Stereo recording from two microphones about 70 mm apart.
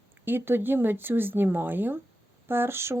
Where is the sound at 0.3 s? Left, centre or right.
Right.